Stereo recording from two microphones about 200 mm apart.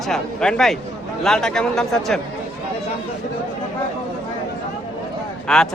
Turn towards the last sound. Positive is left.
turn(degrees=5)  # may be behind; listen again after turning